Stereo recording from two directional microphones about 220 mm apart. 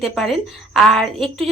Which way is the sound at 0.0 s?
Centre (ahead or behind).